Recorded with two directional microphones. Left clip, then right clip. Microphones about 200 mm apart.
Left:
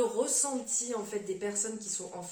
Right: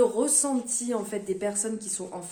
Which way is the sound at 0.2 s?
45° right (ahead or behind).